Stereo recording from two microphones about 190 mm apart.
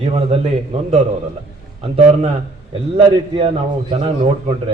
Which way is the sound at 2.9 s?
30° right (ahead or behind).